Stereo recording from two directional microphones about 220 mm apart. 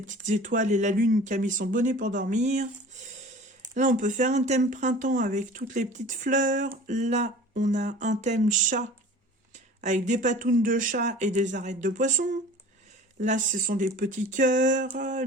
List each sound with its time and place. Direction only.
0.1 s speech: 35° right (ahead or behind)